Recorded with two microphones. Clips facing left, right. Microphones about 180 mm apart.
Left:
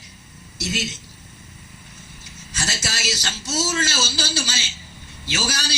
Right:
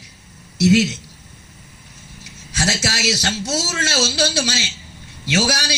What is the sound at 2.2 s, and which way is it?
A man's voice, 65° right (ahead or behind).